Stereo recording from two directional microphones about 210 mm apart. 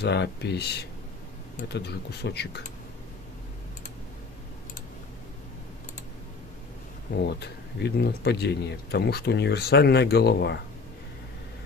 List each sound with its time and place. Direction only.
0.0 s speech: 55° left (ahead or behind)
7.2 s speech: 50° left (ahead or behind)